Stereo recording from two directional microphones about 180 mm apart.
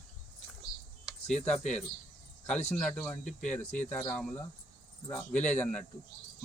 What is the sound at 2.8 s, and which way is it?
Speech, 5° left (ahead or behind).